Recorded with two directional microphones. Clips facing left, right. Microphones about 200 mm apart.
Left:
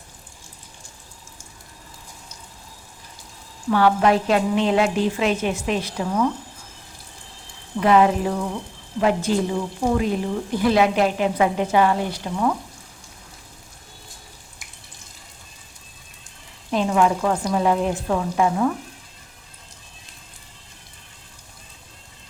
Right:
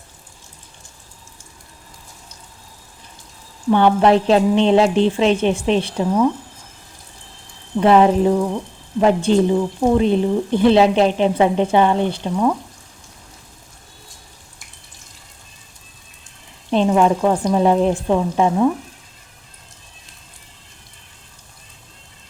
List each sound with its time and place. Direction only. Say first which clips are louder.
3.7 s a woman's voice: right 4 dB; 25° right (ahead or behind)
7.8 s a woman's voice: right 4 dB; 30° right (ahead or behind)
16.7 s a woman's voice: right 4 dB; 25° right (ahead or behind)